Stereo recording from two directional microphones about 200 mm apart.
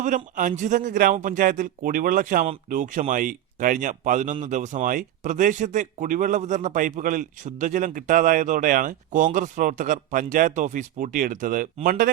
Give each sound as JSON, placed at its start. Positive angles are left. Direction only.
{"t": 0.0, "sound": "speech", "side_deg": -40}